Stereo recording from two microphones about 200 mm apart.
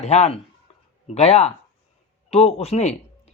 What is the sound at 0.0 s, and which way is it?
Speech, 35° left (ahead or behind).